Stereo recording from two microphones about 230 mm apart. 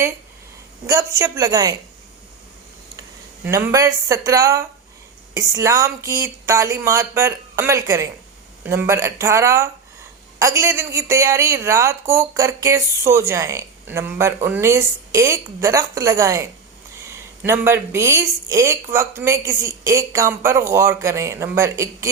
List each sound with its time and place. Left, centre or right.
0.9 s a woman's voice: centre
3.4 s a woman's voice: centre